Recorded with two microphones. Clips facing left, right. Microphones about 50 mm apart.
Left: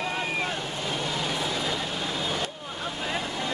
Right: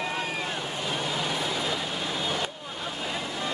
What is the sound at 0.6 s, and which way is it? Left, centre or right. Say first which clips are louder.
Vehicle: even; centre.